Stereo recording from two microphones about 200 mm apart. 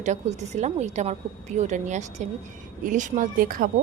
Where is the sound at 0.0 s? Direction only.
35° right (ahead or behind).